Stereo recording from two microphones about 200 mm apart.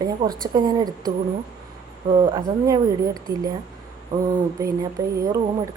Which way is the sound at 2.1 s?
25° right (ahead or behind).